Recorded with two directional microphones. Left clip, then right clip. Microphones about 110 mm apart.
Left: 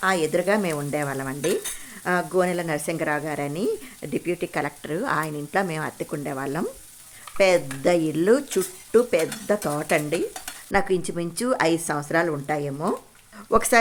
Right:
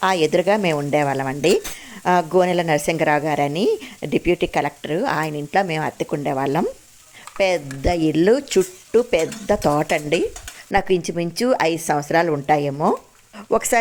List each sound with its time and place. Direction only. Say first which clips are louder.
0.0 s a woman's voice: right 5 dB; 45° right (ahead or behind)
4.5 s speech: right 6 dB; 30° right (ahead or behind); by 10.2 s 45° right (ahead or behind)
10.7 s stir: right 3 dB; 35° right (ahead or behind)
10.9 s speech: right 5 dB; 25° right (ahead or behind)